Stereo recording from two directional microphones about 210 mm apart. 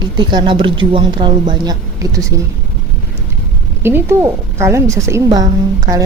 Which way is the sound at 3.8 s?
10° right (ahead or behind).